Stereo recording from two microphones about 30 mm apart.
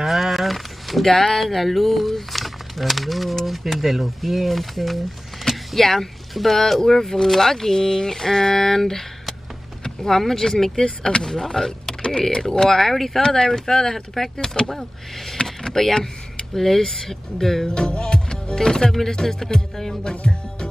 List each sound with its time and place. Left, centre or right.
0.0 s a sound: centre
1.0 s speech: centre
13.2 s speech: centre
15.4 s vehicle: centre
16.5 s speech: centre
17.6 s speech: left
20.0 s music: left